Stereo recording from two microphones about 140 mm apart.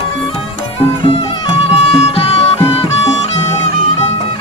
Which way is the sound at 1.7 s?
45° left (ahead or behind).